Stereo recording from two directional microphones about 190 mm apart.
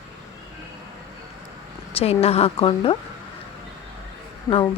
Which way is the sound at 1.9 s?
30° left (ahead or behind).